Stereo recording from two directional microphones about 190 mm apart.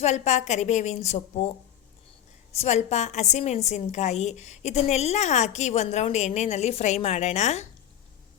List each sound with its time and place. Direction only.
0.0 s a woman's voice: 35° left (ahead or behind)
2.6 s a woman's voice: 35° left (ahead or behind)